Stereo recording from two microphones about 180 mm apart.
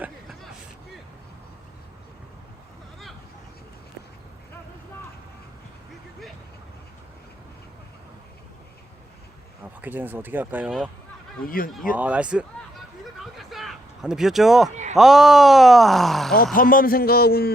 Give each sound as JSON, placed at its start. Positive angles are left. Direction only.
{"t": 9.8, "sound": "speech", "side_deg": -10}
{"t": 11.4, "sound": "speech", "side_deg": 50}
{"t": 11.9, "sound": "speech", "side_deg": -5}
{"t": 13.1, "sound": "a sound", "side_deg": 0}
{"t": 14.7, "sound": "a sound", "side_deg": -40}
{"t": 14.9, "sound": "speech", "side_deg": 0}
{"t": 16.6, "sound": "a man's voice", "side_deg": 50}